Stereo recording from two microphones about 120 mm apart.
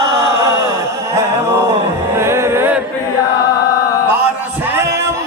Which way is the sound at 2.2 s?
20° right (ahead or behind).